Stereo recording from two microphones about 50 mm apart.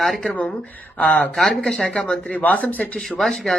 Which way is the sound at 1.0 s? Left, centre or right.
Left.